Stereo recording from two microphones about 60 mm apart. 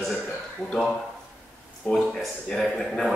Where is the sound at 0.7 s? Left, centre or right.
Centre.